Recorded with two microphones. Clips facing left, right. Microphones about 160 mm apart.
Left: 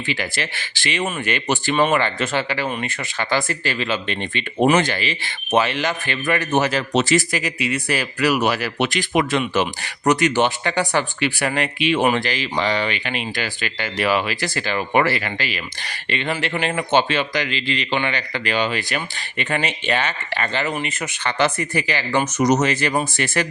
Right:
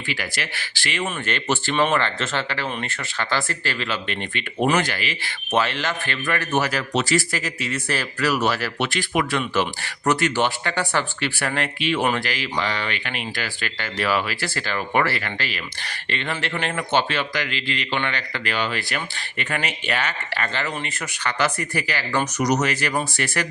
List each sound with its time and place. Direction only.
0.1 s speech: 20° left (ahead or behind)